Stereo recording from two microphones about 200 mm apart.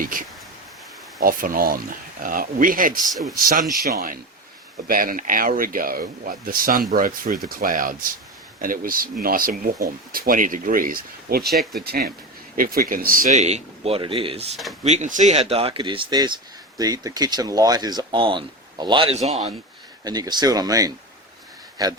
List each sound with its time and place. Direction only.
0.0 s speech: 45° right (ahead or behind)
3.1 s speech: centre (ahead or behind)
3.3 s speech: 45° right (ahead or behind)
11.4 s speech: centre (ahead or behind)
11.8 s speech: 50° right (ahead or behind); by 14.5 s 30° right (ahead or behind)
14.5 s speech: centre (ahead or behind)
14.8 s speech: 35° right (ahead or behind); by 21.9 s 20° right (ahead or behind)